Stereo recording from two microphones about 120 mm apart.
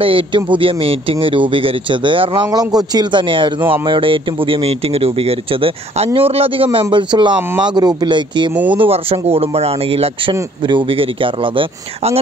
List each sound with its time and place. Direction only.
0.0 s a man's voice: 45° right (ahead or behind)
8.7 s a man's voice: 50° right (ahead or behind)